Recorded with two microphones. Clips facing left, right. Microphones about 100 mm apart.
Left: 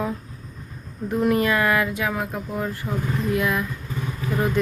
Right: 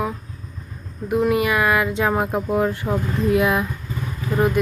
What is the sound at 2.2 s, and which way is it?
Speech, 60° right (ahead or behind).